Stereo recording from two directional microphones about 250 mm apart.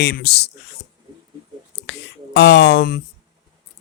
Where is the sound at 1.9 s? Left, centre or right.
Left.